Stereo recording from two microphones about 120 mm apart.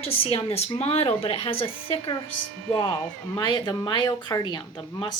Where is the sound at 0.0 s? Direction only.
55° left (ahead or behind).